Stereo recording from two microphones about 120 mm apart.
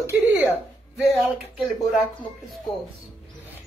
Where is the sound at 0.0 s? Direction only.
15° right (ahead or behind).